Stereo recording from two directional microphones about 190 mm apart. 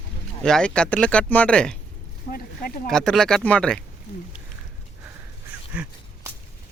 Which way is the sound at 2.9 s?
5° left (ahead or behind).